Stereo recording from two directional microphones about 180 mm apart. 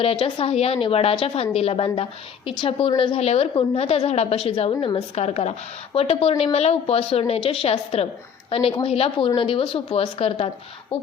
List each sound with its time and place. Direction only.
0.0 s a woman's voice: 30° left (ahead or behind)